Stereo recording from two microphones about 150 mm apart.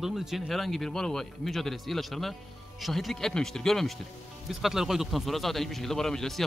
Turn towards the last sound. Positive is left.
turn(degrees=5)  # may be behind; listen again after turning